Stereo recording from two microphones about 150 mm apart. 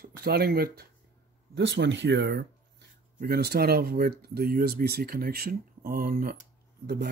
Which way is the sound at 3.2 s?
90° right.